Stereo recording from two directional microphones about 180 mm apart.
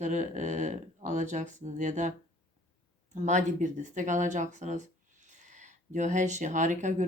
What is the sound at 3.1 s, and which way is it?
Speech, 40° right (ahead or behind).